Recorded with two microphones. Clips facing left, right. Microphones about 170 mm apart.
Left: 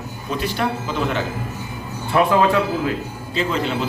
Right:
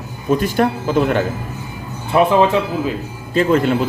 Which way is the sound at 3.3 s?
50° right (ahead or behind).